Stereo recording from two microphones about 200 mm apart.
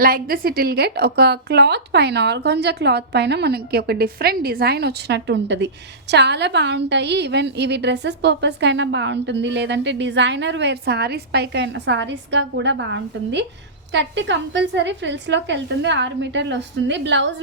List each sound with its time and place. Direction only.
0.0 s a woman's voice: 45° right (ahead or behind); by 17.3 s 65° right (ahead or behind)